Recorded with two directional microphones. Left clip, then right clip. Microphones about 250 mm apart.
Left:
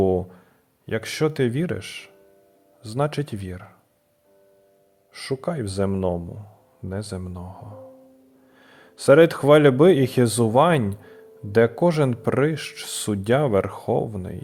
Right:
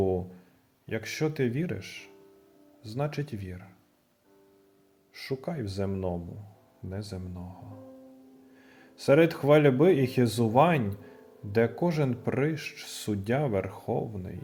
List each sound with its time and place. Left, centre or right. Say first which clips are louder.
0.0 s a sound: left 7 dB; left
0.9 s speech: left 7 dB; left
5.1 s speech: left 8 dB; left